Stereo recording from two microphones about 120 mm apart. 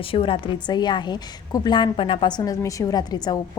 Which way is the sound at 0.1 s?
50° left (ahead or behind).